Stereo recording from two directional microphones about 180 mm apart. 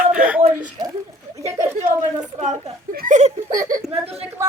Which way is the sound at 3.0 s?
40° right (ahead or behind).